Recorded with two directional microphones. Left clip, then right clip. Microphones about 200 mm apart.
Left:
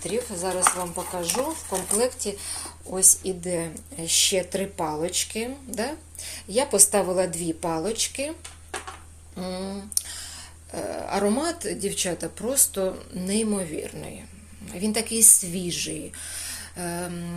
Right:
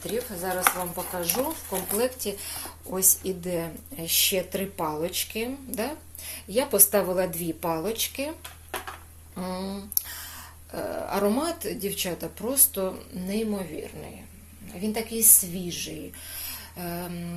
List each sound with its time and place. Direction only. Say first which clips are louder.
0.0 s speech: left 2 dB; 10° left (ahead or behind)
0.4 s speech: left 1 dB; 5° right (ahead or behind)
9.3 s a sound: left 1 dB; centre (ahead or behind)
10.7 s speech: left 1 dB; 5° left (ahead or behind)
13.2 s a woman's voice: left 3 dB; 25° left (ahead or behind)
16.3 s a sound: left 3 dB; 15° left (ahead or behind)